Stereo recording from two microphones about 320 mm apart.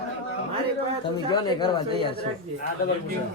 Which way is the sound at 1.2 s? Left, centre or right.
Centre.